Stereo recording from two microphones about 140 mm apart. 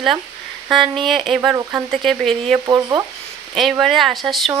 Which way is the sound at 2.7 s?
25° right (ahead or behind).